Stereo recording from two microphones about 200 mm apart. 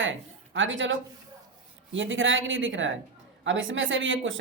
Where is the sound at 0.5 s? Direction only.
70° right (ahead or behind).